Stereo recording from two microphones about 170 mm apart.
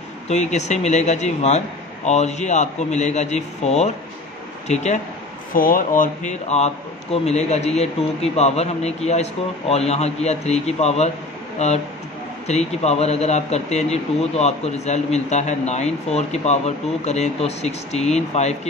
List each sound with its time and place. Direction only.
0.3 s a man's voice: 40° left (ahead or behind)
5.5 s a man's voice: 55° left (ahead or behind); by 18.6 s 40° left (ahead or behind)